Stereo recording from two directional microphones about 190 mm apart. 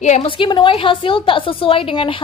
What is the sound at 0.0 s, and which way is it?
A woman's voice, 35° left (ahead or behind).